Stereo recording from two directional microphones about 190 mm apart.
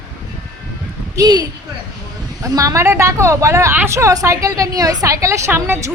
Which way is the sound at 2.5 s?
15° right (ahead or behind).